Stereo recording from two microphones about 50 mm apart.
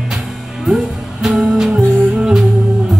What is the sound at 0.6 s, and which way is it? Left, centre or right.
Music, centre.